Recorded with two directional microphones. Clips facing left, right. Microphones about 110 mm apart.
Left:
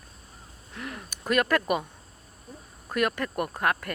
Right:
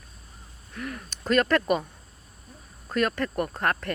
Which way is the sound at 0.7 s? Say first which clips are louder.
Right 2 dB; 20° left (ahead or behind).